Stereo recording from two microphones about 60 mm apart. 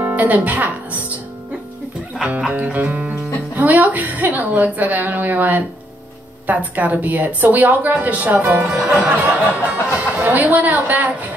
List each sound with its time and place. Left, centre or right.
0.0 s speech: right
2.5 s a woman's voice: right
8.6 s speech: centre
9.2 s a woman's voice: right